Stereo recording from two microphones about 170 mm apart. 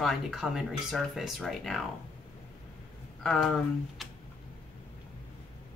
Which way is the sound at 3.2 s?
Centre (ahead or behind).